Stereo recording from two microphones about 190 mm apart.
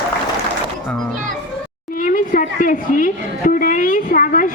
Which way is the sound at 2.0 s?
45° left (ahead or behind).